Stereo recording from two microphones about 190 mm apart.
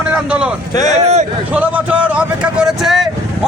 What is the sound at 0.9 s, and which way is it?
Speech, 35° right (ahead or behind).